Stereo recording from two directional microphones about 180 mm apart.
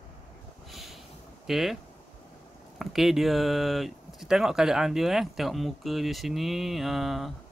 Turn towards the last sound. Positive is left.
turn(degrees=0)  # may be behind; listen again after turning